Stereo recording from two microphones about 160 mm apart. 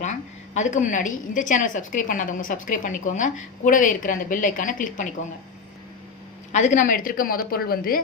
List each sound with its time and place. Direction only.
0.0 s a woman's voice: 50° left (ahead or behind)
6.5 s a woman's voice: 50° left (ahead or behind); by 8.0 s 65° left (ahead or behind)